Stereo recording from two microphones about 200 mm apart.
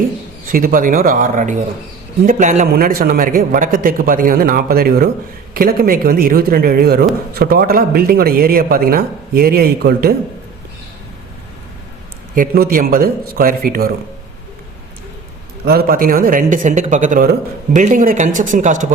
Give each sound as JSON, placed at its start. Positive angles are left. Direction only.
{"t": 0.5, "sound": "a man's voice", "side_deg": -45}
{"t": 12.3, "sound": "a man's voice", "side_deg": -45}
{"t": 15.6, "sound": "a man's voice", "side_deg": -50}